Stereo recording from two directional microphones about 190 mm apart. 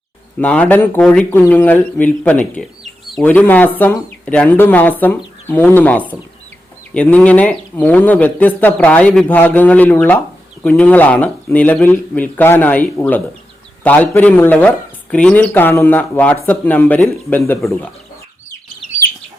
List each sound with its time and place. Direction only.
0.3 s speech: 5° left (ahead or behind)